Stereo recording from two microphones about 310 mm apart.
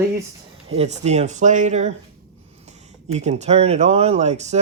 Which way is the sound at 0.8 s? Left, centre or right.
Right.